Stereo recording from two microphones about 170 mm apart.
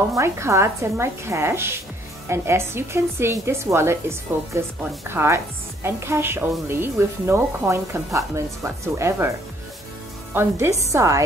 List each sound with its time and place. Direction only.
0.1 s a woman's voice: 15° right (ahead or behind)
10.3 s a woman's voice: 15° right (ahead or behind)